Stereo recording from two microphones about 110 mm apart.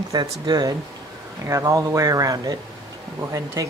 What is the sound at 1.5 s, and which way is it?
Speech, 30° right (ahead or behind).